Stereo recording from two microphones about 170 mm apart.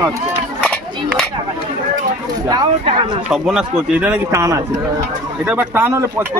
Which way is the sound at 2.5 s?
25° right (ahead or behind).